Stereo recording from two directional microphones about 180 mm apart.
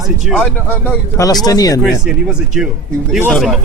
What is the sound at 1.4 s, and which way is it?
Speech, 20° left (ahead or behind).